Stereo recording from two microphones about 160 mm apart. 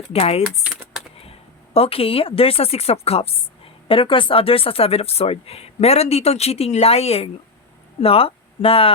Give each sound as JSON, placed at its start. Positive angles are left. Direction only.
{"t": 0.1, "sound": "a woman's voice", "side_deg": 40}
{"t": 0.6, "sound": "a sound", "side_deg": -5}
{"t": 1.2, "sound": "a woman's voice", "side_deg": 40}